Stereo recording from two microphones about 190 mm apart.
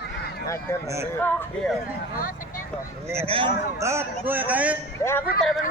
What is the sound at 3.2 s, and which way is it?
Speech, 30° right (ahead or behind).